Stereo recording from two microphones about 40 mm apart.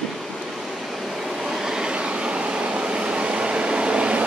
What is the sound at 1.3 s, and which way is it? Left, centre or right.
Train, centre.